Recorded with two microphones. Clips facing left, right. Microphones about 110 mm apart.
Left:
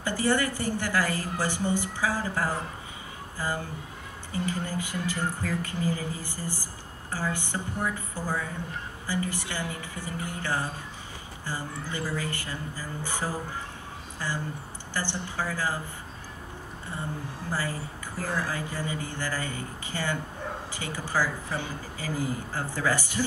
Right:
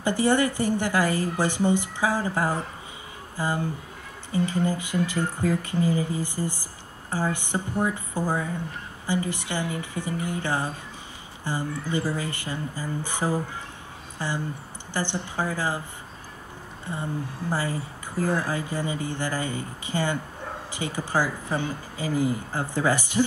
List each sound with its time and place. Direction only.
0.0 s a woman's voice: 20° right (ahead or behind)
17.5 s a woman's voice: 20° right (ahead or behind)